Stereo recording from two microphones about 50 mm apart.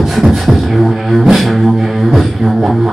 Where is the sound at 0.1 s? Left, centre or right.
Centre.